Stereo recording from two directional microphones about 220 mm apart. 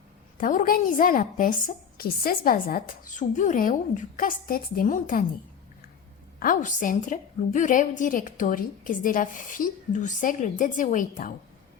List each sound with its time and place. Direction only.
0.3 s a woman's voice: 40° left (ahead or behind)
6.4 s a woman's voice: 35° left (ahead or behind)